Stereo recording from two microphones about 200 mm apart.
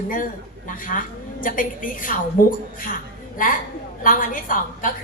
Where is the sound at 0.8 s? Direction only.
40° left (ahead or behind).